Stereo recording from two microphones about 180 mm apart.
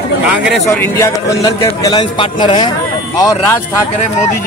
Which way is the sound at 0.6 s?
15° left (ahead or behind).